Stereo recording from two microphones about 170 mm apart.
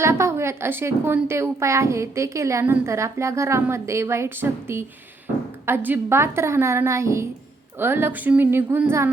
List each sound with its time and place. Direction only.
0.0 s a woman's voice: 15° right (ahead or behind)